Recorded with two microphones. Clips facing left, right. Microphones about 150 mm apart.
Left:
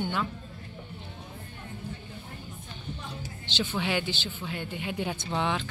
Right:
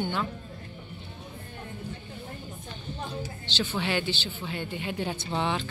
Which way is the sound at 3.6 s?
5° left (ahead or behind).